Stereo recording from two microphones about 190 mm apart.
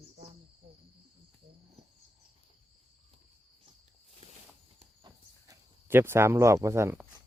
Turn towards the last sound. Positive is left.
turn(degrees=-15)  # may be behind; listen again after turning